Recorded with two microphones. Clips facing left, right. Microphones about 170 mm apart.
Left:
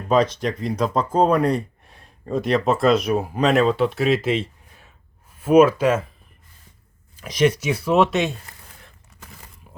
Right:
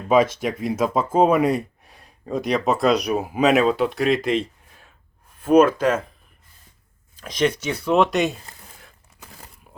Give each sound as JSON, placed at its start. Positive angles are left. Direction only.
{"t": 0.6, "sound": "speech", "side_deg": -5}
{"t": 7.2, "sound": "speech", "side_deg": 10}